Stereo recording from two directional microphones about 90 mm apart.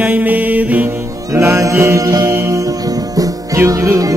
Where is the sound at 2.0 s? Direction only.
45° right (ahead or behind).